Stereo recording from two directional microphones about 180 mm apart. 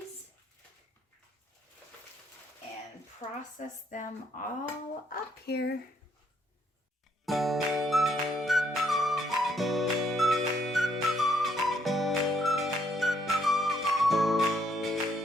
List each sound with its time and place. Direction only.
3.6 s speech: 45° left (ahead or behind)
5.0 s speech: 65° left (ahead or behind)
7.3 s music: centre (ahead or behind)